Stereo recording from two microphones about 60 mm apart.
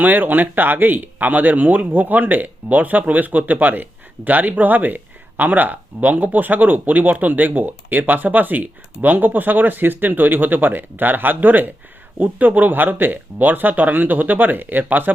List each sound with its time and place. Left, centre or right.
0.0 s speech: right